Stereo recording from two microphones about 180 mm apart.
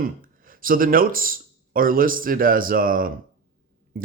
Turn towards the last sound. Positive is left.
turn(degrees=-50)  # may be behind; listen again after turning